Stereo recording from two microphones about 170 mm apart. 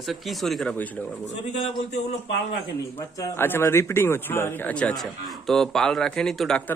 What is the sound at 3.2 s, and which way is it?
Speech, 15° left (ahead or behind).